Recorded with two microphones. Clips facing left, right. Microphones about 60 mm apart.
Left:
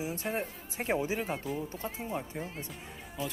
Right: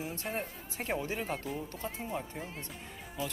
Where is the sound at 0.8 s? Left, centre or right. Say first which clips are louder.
Left 4 dB; centre.